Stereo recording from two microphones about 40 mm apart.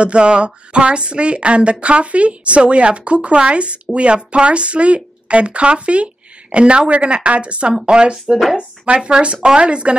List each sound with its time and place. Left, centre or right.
0.0 s a woman's voice: right